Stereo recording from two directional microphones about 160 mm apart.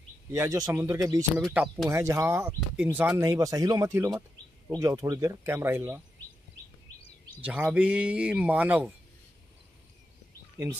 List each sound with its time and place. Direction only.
0.3 s speech: 20° right (ahead or behind)
1.4 s speech: 5° right (ahead or behind)
1.9 s a man's voice: 20° right (ahead or behind)
7.4 s a man's voice: 10° right (ahead or behind)